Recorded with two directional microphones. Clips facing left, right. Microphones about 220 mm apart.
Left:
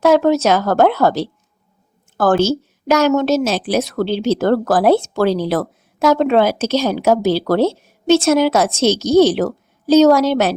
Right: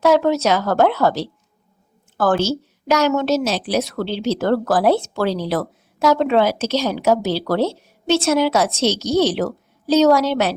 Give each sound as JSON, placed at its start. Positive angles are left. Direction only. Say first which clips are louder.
{"t": 0.0, "sound": "a woman's voice", "louder": "left 3 dB", "side_deg": 45}